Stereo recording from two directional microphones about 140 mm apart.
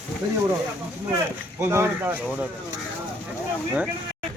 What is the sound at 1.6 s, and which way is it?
Speech, 15° right (ahead or behind).